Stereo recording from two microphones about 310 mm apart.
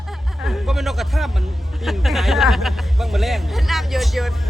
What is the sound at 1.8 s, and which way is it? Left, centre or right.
Speech, centre.